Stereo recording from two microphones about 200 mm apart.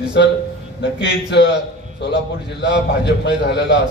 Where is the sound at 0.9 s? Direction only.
60° left (ahead or behind).